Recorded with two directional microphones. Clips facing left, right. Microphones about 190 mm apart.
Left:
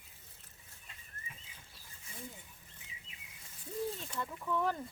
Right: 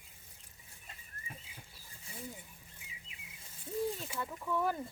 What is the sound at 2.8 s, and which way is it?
Chirp, 10° right (ahead or behind).